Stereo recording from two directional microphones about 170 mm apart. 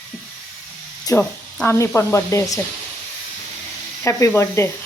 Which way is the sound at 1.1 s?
20° left (ahead or behind).